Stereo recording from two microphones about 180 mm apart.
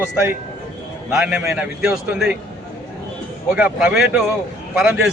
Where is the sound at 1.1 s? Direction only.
5° right (ahead or behind).